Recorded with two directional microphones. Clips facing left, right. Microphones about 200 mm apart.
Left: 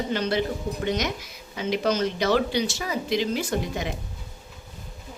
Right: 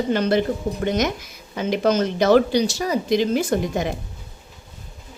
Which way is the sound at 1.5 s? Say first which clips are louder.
Right 5 dB; 50° right (ahead or behind).